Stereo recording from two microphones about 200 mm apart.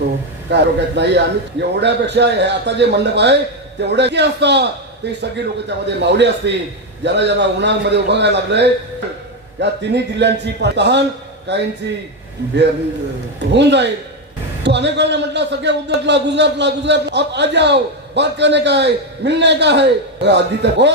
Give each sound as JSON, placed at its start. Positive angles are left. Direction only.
{"t": 0.5, "sound": "a man's voice", "side_deg": -60}
{"t": 13.5, "sound": "a man's voice", "side_deg": -60}